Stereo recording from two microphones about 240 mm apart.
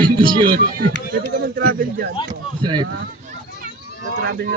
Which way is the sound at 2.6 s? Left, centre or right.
Centre.